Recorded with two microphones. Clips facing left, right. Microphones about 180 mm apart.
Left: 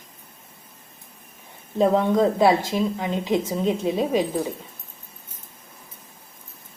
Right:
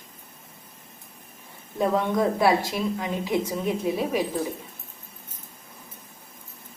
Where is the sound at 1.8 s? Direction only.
25° left (ahead or behind).